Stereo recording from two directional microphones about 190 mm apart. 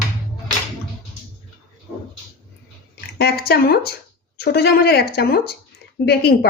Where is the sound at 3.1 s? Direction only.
55° left (ahead or behind).